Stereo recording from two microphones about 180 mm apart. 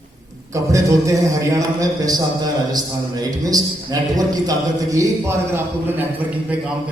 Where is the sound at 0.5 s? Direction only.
20° right (ahead or behind).